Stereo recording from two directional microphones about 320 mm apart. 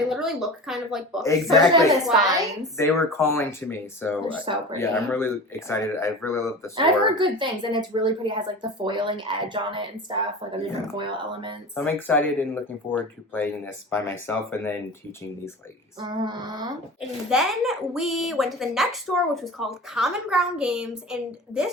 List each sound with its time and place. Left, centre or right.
0.1 s speech: centre
4.5 s a woman's voice: centre
4.8 s speech: centre
6.7 s a woman's voice: centre
11.7 s speech: centre
16.0 s a woman's voice: centre
17.0 s speech: centre